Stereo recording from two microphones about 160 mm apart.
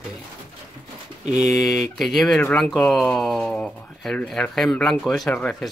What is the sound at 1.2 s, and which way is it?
Speech, 5° right (ahead or behind).